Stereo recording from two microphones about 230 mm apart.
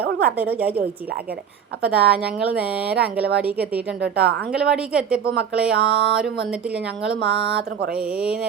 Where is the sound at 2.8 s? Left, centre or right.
Right.